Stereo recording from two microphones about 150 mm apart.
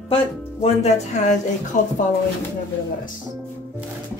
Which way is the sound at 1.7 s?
60° left (ahead or behind).